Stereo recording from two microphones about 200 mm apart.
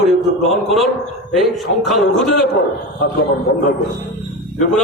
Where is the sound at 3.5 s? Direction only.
45° left (ahead or behind).